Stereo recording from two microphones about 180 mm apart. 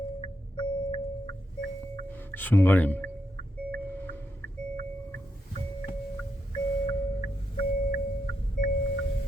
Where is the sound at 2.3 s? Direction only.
10° left (ahead or behind).